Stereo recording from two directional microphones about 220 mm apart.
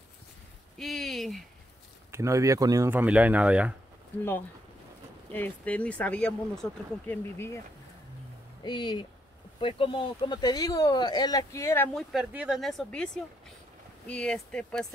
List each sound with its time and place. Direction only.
0.7 s a sound: centre (ahead or behind)
2.0 s speech: 10° right (ahead or behind)
5.3 s speech: 5° left (ahead or behind)
8.6 s speech: 20° left (ahead or behind); by 14.9 s 5° left (ahead or behind)